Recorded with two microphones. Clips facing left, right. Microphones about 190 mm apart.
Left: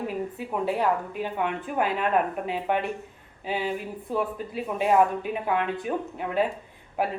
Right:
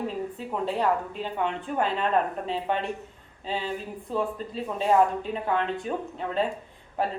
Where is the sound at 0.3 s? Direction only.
10° left (ahead or behind).